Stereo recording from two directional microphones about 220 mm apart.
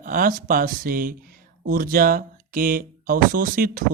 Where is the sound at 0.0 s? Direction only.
40° right (ahead or behind).